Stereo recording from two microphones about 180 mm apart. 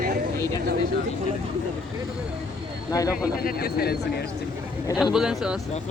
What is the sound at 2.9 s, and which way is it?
Speech, 20° left (ahead or behind).